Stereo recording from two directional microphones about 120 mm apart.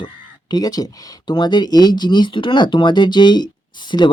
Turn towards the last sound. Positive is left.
turn(degrees=40)  # may be behind; listen again after turning